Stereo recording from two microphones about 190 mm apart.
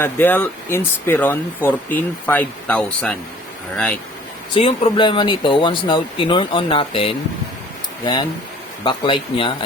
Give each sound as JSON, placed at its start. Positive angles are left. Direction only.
{"t": 0.0, "sound": "speech", "side_deg": 10}
{"t": 4.5, "sound": "speech", "side_deg": 30}